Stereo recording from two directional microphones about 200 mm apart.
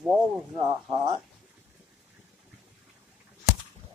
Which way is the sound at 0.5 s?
20° right (ahead or behind).